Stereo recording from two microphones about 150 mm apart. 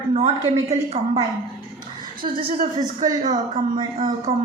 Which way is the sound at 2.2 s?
75° right (ahead or behind).